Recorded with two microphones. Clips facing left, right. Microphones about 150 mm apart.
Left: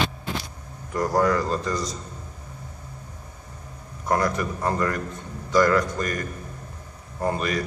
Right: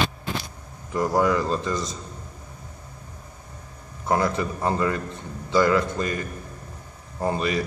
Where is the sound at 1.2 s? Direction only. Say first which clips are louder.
Even; 20° right (ahead or behind).